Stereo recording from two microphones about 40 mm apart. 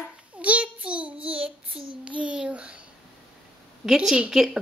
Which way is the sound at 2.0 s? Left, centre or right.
Right.